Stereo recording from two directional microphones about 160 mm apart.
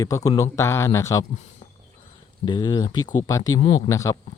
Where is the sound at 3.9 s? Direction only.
20° left (ahead or behind).